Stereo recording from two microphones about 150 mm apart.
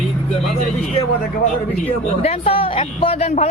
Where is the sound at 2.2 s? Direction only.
40° left (ahead or behind).